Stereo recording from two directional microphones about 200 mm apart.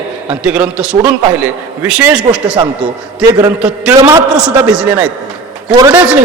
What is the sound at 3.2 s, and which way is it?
A man's voice, 15° right (ahead or behind).